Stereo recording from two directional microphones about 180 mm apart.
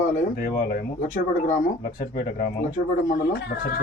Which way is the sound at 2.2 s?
55° left (ahead or behind).